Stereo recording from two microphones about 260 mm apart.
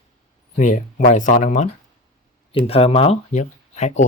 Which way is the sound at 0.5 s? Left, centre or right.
Left.